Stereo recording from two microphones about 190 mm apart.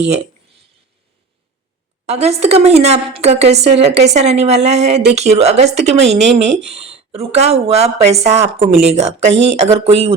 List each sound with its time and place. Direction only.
2.0 s a woman's voice: 35° right (ahead or behind)